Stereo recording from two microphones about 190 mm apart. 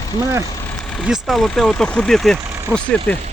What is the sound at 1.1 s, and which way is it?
Speech, centre (ahead or behind).